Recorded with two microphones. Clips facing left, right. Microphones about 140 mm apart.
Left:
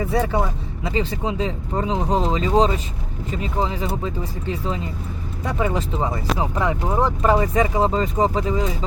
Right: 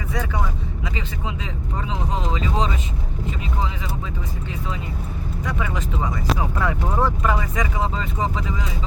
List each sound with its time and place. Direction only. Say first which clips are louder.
0.0 s vehicle: left 6 dB; 35° left (ahead or behind)
0.9 s speech: left 9 dB; 35° left (ahead or behind)
6.4 s speech: left 2 dB; 20° left (ahead or behind)
7.2 s speech: left 6 dB; 30° left (ahead or behind)